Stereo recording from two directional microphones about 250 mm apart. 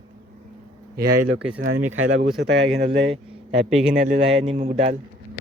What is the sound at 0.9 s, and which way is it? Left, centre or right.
Speech, right.